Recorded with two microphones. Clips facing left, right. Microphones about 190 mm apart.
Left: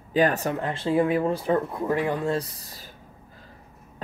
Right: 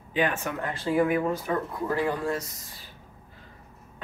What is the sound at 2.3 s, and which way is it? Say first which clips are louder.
Speech: left 5 dB; 30° left (ahead or behind).